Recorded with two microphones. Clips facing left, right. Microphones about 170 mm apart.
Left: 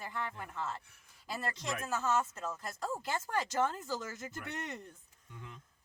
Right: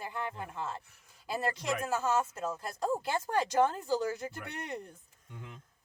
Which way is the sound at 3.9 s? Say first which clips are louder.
Right 8 dB; 35° right (ahead or behind).